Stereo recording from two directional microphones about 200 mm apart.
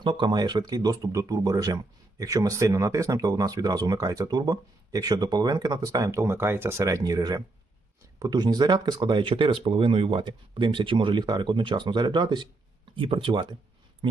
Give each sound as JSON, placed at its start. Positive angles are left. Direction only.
{"t": 0.0, "sound": "speech", "side_deg": -25}